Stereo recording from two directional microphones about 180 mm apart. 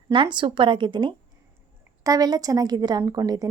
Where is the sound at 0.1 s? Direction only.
25° right (ahead or behind).